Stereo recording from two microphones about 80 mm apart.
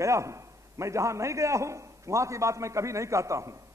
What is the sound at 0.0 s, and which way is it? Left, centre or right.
A man's voice, right.